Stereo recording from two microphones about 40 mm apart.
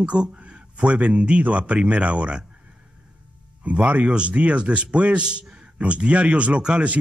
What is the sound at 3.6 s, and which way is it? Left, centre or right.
Speech, right.